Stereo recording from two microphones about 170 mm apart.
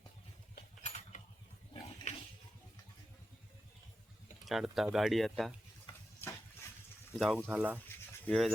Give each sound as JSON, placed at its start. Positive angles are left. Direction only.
{"t": 0.8, "sound": "a sound", "side_deg": 45}
{"t": 4.4, "sound": "speech", "side_deg": 0}
{"t": 5.8, "sound": "stir", "side_deg": 15}
{"t": 7.2, "sound": "speech", "side_deg": 0}
{"t": 8.3, "sound": "speech", "side_deg": 0}